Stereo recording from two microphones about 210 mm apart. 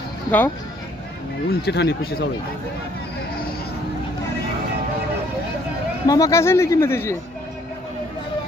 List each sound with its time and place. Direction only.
0.3 s speech: 5° left (ahead or behind)
1.5 s speech: 50° left (ahead or behind)
6.1 s speech: 15° left (ahead or behind)